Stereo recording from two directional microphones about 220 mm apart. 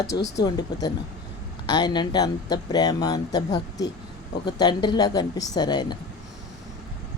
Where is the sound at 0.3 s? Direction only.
15° left (ahead or behind).